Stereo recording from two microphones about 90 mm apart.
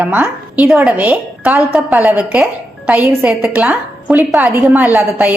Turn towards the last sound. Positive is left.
turn(degrees=-20)  # may be behind; listen again after turning